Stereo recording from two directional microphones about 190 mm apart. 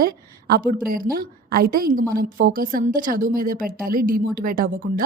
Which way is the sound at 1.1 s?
50° right (ahead or behind).